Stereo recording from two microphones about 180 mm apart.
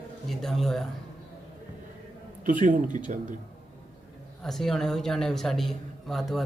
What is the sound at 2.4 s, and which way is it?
Speech, 50° right (ahead or behind).